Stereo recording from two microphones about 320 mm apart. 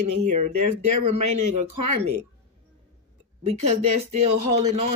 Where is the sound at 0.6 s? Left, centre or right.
Right.